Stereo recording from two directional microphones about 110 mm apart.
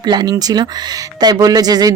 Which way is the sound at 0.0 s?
40° right (ahead or behind).